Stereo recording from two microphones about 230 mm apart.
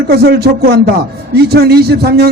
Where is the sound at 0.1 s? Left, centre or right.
Right.